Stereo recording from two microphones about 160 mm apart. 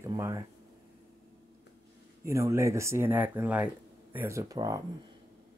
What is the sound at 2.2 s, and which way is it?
Speech, 20° right (ahead or behind).